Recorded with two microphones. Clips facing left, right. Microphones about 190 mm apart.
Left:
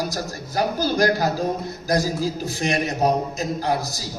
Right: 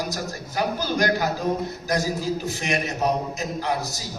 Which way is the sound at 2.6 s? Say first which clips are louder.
Left 4 dB; 35° left (ahead or behind).